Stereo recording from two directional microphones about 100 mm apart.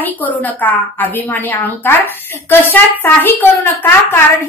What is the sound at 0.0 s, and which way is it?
A woman's voice, 15° left (ahead or behind).